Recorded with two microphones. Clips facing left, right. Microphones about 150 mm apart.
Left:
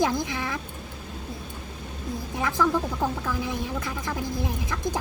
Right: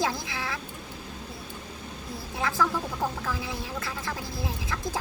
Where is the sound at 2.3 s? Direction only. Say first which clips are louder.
Left 3 dB; 15° left (ahead or behind).